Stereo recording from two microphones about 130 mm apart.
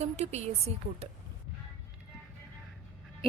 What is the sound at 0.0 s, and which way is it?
Speech, 55° right (ahead or behind).